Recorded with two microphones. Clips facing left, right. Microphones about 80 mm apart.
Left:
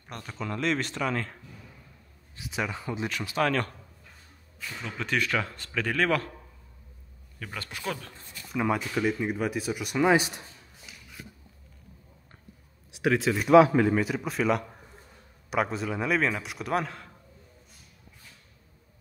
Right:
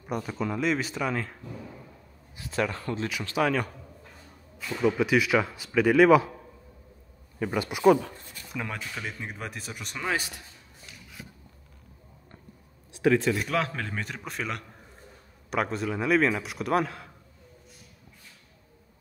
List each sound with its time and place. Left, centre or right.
0.0 s speech: centre
2.4 s a man's voice: centre
3.3 s speech: centre
4.8 s speech: centre
7.3 s speech: centre
8.5 s a man's voice: centre
10.0 s a man's voice: centre
10.9 s a sound: centre
12.9 s speech: centre
13.5 s a man's voice: centre